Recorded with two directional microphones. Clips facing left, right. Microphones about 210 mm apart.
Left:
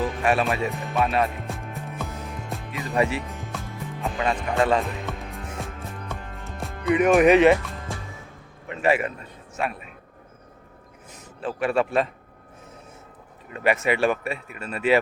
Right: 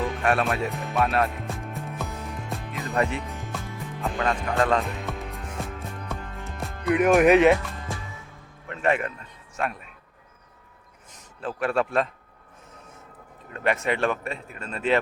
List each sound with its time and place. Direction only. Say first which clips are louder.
0.0 s speech: left 1 dB; centre (ahead or behind)
2.5 s music: left 1 dB; centre (ahead or behind)
8.7 s a man's voice: left 2 dB; 5° left (ahead or behind)
11.3 s a man's voice: left 2 dB; centre (ahead or behind)
13.5 s speech: left 3 dB; 5° left (ahead or behind)